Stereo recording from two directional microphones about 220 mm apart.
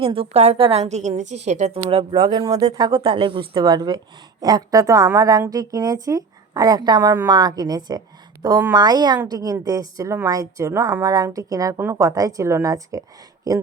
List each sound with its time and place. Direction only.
0.0 s a woman's voice: 25° right (ahead or behind)